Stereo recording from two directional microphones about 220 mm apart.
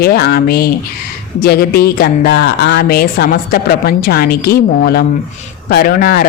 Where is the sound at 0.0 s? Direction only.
45° left (ahead or behind).